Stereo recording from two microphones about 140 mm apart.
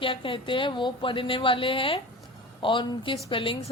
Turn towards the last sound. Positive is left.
turn(degrees=40)  # may be behind; listen again after turning